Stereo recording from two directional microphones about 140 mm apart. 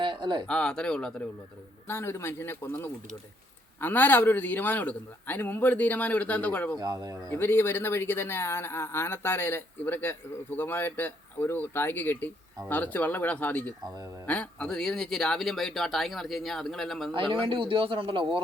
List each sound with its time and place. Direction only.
0.0 s a sound: 35° right (ahead or behind)
0.4 s speech: 5° left (ahead or behind)
1.9 s speech: 15° left (ahead or behind)
6.7 s speech: 25° right (ahead or behind)
7.3 s speech: 15° left (ahead or behind)
13.8 s speech: 30° right (ahead or behind)
14.3 s speech: 10° left (ahead or behind)
17.1 s a man's voice: 35° right (ahead or behind)